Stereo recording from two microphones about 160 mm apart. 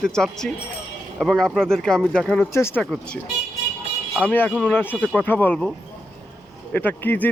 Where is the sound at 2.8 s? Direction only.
5° left (ahead or behind).